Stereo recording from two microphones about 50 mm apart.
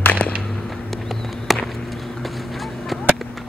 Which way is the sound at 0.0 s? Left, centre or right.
Left.